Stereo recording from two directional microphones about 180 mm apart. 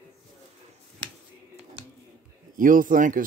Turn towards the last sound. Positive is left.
turn(degrees=-45)  # may be behind; listen again after turning